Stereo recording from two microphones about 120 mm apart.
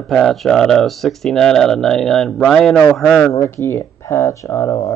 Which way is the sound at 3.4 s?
20° left (ahead or behind).